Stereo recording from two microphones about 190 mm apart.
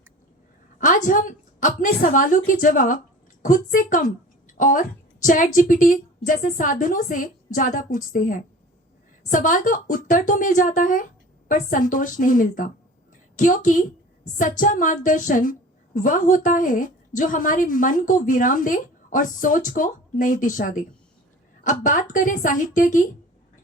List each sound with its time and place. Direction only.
0.8 s a woman's voice: 45° left (ahead or behind)